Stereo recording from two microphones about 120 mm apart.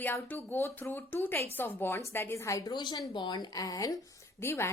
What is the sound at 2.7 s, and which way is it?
A woman's voice, 35° left (ahead or behind).